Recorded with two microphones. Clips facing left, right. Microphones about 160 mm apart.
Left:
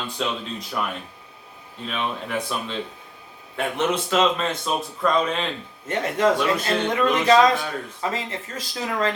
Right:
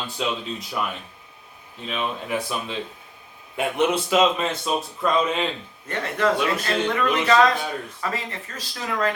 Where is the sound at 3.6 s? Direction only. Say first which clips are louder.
Right 2 dB; 10° right (ahead or behind).